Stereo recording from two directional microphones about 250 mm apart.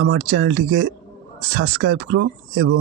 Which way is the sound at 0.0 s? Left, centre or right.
Right.